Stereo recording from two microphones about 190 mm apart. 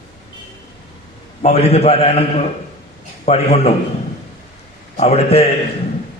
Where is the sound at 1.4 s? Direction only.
35° left (ahead or behind).